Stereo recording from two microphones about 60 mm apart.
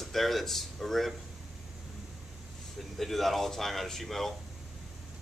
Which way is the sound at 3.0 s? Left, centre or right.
Centre.